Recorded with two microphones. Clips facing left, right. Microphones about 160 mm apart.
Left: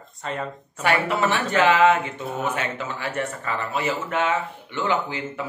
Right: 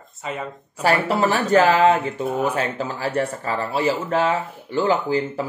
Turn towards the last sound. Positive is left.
turn(degrees=-35)  # may be behind; listen again after turning